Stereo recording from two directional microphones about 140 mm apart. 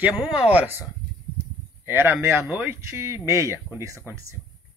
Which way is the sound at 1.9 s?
15° right (ahead or behind).